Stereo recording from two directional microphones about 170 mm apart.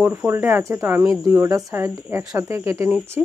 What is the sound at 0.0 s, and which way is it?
Speech, 10° right (ahead or behind).